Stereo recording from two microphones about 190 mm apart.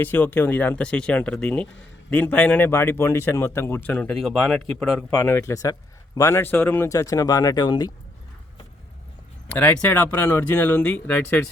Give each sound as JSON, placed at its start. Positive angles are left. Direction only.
{"t": 0.0, "sound": "a man's voice", "side_deg": 10}
{"t": 9.5, "sound": "speech", "side_deg": 10}